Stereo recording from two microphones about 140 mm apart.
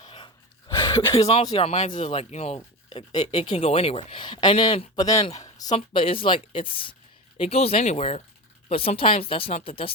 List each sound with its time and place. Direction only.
0.0 s gasp: 40° left (ahead or behind)
0.9 s speech: 40° left (ahead or behind)
3.6 s speech: 45° left (ahead or behind)
4.9 s speech: 25° left (ahead or behind)
5.2 s speech: 50° left (ahead or behind)
5.7 s speech: 40° left (ahead or behind)